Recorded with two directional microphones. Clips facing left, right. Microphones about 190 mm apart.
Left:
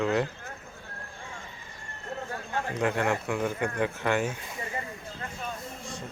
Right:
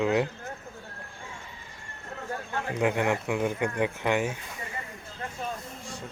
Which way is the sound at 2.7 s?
15° right (ahead or behind).